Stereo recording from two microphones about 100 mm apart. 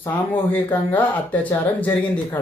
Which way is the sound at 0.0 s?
20° left (ahead or behind).